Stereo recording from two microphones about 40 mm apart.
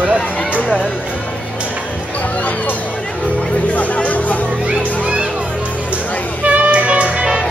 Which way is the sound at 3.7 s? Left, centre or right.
Left.